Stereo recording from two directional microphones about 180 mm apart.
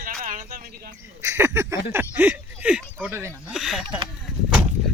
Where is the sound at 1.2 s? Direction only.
15° right (ahead or behind).